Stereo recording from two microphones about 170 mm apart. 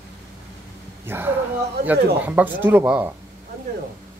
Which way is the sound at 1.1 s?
10° right (ahead or behind).